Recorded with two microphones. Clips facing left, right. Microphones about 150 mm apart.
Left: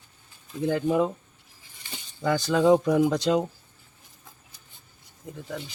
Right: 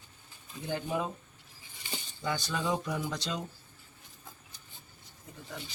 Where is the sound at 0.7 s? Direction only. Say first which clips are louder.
Left 9 dB; 65° left (ahead or behind).